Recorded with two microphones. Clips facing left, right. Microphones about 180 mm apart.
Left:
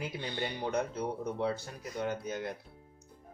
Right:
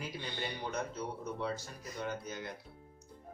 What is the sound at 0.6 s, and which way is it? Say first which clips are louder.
Speech: left 7 dB; 55° left (ahead or behind).